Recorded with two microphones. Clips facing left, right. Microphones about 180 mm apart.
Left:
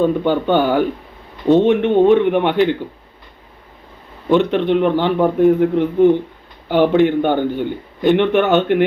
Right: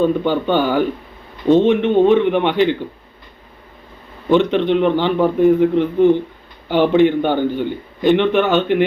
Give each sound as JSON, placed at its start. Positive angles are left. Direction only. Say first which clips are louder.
{"t": 0.0, "sound": "a man's voice", "louder": "left 1 dB", "side_deg": 15}
{"t": 4.3, "sound": "a man's voice", "louder": "even", "side_deg": 5}